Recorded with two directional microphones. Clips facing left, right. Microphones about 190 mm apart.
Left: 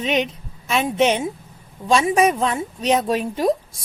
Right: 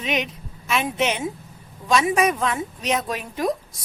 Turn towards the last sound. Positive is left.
turn(degrees=30)  # may be behind; listen again after turning